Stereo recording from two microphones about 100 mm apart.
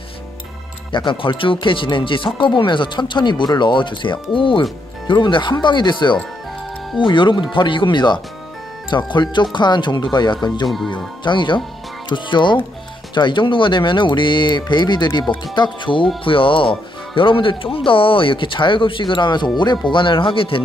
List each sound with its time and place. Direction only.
0.9 s speech: 55° left (ahead or behind)